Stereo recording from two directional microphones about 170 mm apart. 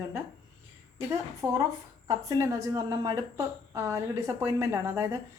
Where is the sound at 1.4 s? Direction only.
20° right (ahead or behind).